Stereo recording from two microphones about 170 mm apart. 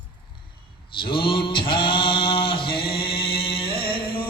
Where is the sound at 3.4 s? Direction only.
30° left (ahead or behind).